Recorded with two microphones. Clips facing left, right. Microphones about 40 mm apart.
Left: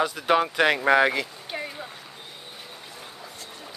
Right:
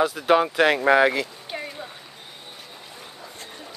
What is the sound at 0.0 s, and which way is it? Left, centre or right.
Speech, centre.